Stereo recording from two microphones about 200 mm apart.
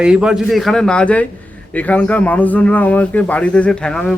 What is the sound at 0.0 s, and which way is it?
A man's voice, 5° right (ahead or behind).